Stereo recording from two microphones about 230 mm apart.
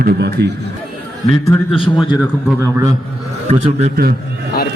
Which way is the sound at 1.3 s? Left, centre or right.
Left.